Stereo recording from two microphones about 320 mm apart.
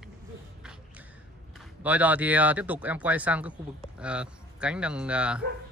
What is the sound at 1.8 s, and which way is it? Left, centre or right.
Speech, centre.